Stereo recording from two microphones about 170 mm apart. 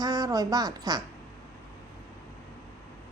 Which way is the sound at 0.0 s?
20° right (ahead or behind).